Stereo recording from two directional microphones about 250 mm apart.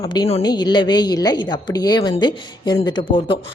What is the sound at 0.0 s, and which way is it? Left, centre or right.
A woman's voice, left.